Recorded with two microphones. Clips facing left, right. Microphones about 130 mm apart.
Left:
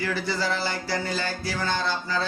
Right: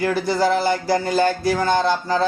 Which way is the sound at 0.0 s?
50° right (ahead or behind).